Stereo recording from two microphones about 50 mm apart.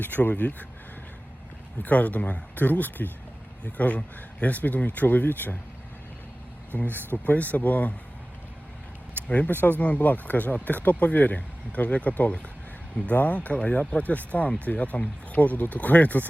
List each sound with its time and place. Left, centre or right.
0.0 s speech: left
1.8 s speech: left
6.7 s speech: left
9.2 s speech: left
9.5 s speech: left
9.7 s speech: left